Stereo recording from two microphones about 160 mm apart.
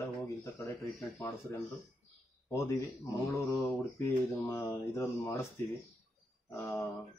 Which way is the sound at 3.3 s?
20° left (ahead or behind).